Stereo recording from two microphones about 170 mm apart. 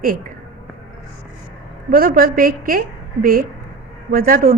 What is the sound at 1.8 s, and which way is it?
A woman's voice, 60° right (ahead or behind).